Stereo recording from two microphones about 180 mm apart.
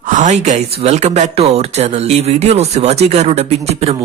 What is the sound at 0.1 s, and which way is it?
Speech, 40° right (ahead or behind).